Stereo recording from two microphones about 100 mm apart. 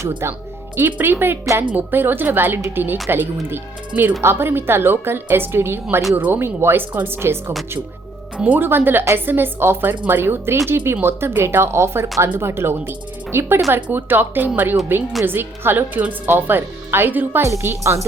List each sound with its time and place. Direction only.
0.8 s speech: 20° right (ahead or behind)